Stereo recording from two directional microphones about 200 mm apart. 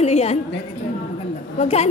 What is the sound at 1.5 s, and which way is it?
Speech, 35° left (ahead or behind).